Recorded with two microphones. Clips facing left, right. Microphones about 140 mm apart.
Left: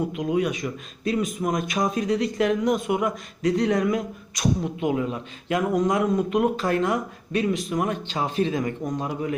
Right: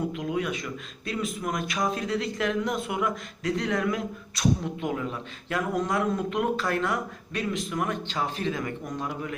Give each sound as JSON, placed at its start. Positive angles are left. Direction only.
{"t": 0.1, "sound": "speech", "side_deg": 20}